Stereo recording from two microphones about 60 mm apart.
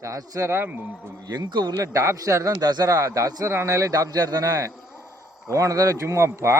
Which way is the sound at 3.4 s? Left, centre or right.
Right.